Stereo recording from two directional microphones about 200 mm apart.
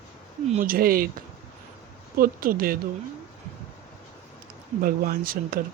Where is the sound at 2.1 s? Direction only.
45° right (ahead or behind).